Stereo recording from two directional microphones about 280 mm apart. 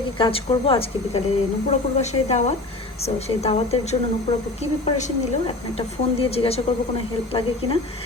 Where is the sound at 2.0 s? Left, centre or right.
Left.